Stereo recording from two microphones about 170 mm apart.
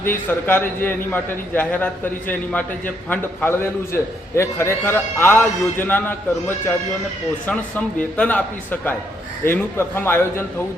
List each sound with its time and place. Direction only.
0.0 s a man's voice: 10° left (ahead or behind)